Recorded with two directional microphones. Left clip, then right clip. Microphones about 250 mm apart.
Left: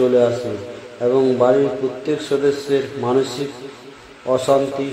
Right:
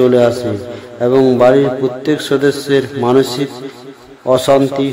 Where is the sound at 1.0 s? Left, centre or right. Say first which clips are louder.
Right 6 dB; right.